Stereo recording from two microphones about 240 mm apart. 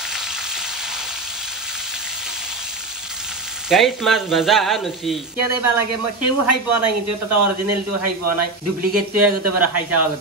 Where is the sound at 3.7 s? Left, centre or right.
Centre.